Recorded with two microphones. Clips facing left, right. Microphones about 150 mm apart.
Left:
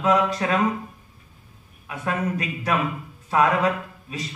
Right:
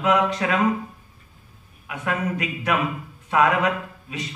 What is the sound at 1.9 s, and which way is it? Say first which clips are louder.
A man's voice: even; 30° left (ahead or behind).